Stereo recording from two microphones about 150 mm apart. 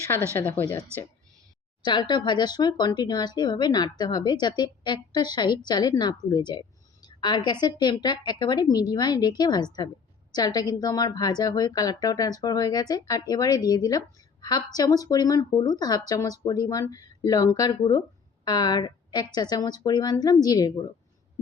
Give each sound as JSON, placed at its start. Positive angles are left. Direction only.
{"t": 0.3, "sound": "a woman's voice", "side_deg": 15}
{"t": 1.8, "sound": "a woman's voice", "side_deg": 30}